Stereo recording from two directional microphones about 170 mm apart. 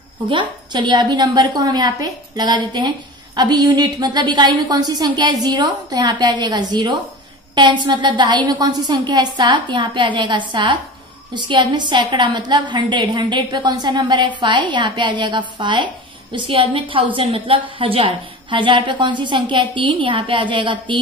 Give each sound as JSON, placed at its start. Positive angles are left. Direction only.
{"t": 0.3, "sound": "a woman's voice", "side_deg": -30}